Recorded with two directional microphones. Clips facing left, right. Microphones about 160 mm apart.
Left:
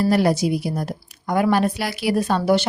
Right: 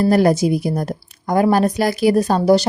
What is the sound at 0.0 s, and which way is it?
A woman's voice, 45° right (ahead or behind).